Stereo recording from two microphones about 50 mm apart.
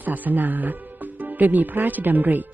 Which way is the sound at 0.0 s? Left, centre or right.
Right.